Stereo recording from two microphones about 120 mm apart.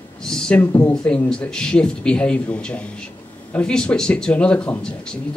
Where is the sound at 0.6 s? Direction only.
15° left (ahead or behind).